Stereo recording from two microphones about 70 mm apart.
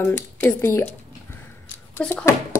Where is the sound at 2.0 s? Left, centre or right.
Centre.